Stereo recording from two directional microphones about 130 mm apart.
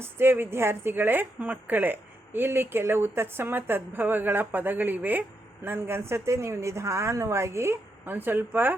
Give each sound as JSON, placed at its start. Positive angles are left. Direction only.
{"t": 0.0, "sound": "a woman's voice", "side_deg": -15}